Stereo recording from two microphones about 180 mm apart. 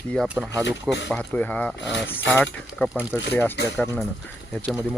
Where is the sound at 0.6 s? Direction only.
75° left (ahead or behind).